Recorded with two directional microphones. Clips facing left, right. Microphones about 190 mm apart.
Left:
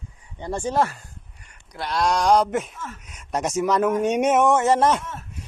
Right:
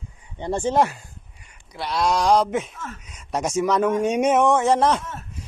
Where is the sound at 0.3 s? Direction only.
25° right (ahead or behind).